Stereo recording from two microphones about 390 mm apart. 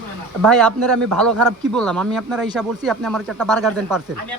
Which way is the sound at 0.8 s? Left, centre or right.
Right.